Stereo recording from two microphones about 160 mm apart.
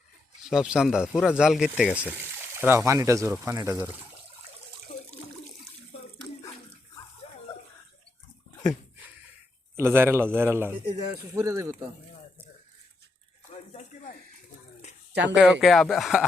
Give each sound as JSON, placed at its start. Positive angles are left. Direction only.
{"t": 0.4, "sound": "a man's voice", "side_deg": -5}
{"t": 7.2, "sound": "dog", "side_deg": 40}
{"t": 9.7, "sound": "a man's voice", "side_deg": -15}
{"t": 15.1, "sound": "speech", "side_deg": -90}
{"t": 15.4, "sound": "speech", "side_deg": 0}